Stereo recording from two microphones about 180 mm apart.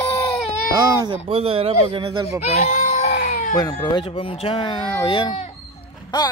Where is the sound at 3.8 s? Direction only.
25° left (ahead or behind).